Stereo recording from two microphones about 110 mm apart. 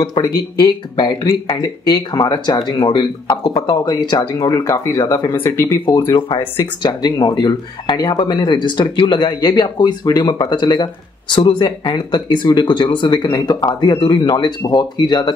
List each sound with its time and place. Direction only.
0.2 s speech: 40° left (ahead or behind)
4.4 s speech: 30° left (ahead or behind)
6.1 s speech: 50° left (ahead or behind)